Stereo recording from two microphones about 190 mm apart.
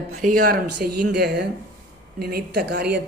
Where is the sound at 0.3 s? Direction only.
50° right (ahead or behind).